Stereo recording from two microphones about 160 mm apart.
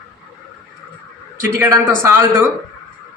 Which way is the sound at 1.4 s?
15° right (ahead or behind).